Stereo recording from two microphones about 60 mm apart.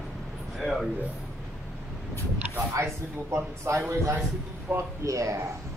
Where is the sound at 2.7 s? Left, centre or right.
Right.